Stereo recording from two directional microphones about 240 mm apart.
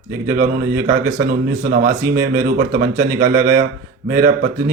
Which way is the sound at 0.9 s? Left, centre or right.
Right.